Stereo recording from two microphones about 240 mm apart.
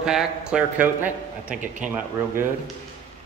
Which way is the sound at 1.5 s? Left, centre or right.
Right.